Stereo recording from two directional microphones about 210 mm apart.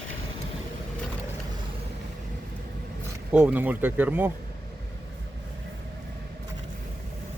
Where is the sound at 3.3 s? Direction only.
5° right (ahead or behind).